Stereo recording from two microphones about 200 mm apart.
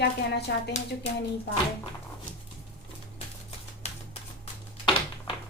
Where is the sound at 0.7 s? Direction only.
35° left (ahead or behind).